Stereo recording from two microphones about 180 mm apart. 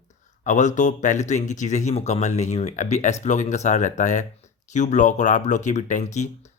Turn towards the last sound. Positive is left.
turn(degrees=40)  # may be behind; listen again after turning